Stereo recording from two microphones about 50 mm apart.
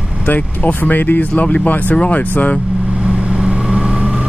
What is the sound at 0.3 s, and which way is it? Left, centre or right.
Speech, left.